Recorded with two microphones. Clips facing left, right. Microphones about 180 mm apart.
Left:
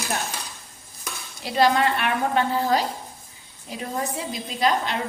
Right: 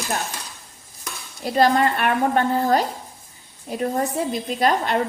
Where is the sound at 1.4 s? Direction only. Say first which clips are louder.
Right 2 dB; 45° right (ahead or behind).